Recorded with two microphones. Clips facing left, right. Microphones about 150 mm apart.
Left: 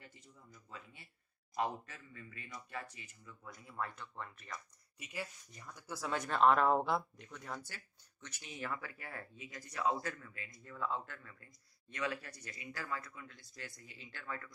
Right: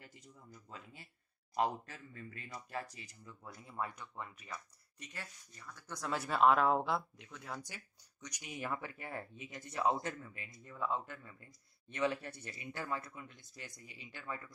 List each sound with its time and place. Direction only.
1.5 s speech: 35° right (ahead or behind)
3.6 s speech: 15° right (ahead or behind)
4.9 s speech: 10° left (ahead or behind)
5.9 s speech: 5° right (ahead or behind)
7.6 s speech: 15° right (ahead or behind)